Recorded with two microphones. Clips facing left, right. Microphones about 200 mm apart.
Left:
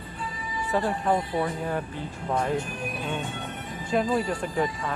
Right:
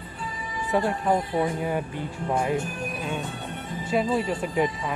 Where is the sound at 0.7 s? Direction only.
10° right (ahead or behind).